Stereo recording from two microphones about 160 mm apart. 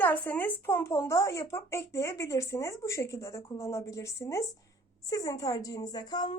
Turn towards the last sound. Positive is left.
turn(degrees=25)  # may be behind; listen again after turning